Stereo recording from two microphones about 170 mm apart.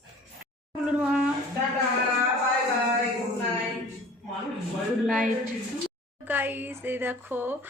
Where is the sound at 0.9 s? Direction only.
5° right (ahead or behind).